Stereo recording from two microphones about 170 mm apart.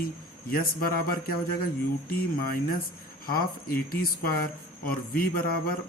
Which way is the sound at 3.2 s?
60° left (ahead or behind).